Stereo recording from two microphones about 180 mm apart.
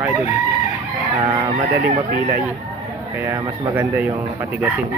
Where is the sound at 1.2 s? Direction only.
25° right (ahead or behind).